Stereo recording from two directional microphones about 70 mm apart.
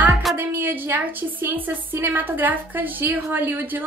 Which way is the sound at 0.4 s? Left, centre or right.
Right.